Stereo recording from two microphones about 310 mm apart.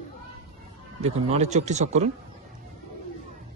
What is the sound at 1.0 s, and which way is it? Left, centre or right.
A man's voice, right.